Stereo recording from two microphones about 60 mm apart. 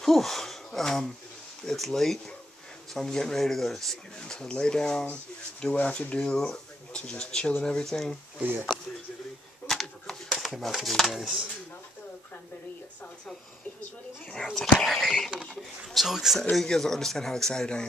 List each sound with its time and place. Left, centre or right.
0.0 s speech: centre
8.4 s speech: right
9.7 s a sound: centre
11.1 s speech: centre
14.3 s speech: centre
16.6 s speech: centre